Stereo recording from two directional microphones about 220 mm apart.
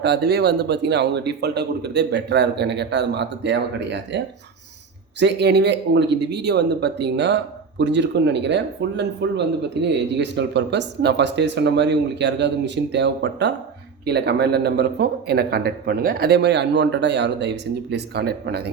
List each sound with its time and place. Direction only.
0.0 s speech: 50° right (ahead or behind)
5.2 s speech: 50° right (ahead or behind)